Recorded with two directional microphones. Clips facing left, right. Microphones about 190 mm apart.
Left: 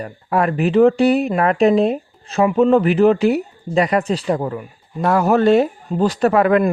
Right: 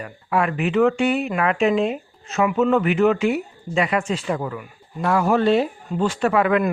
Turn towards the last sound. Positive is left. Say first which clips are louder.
# left 4 dB
turn(degrees=40)  # may be behind; listen again after turning